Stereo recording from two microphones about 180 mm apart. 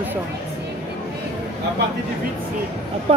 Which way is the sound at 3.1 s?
35° right (ahead or behind).